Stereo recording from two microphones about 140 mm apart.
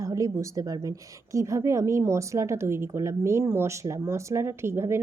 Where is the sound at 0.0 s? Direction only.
25° right (ahead or behind).